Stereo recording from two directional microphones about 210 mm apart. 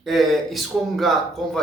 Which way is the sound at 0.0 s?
Centre (ahead or behind).